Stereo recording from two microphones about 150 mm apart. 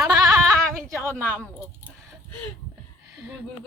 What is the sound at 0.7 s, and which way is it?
Speech, 15° right (ahead or behind).